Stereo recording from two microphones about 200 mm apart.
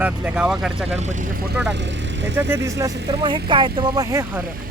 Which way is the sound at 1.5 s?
60° right (ahead or behind).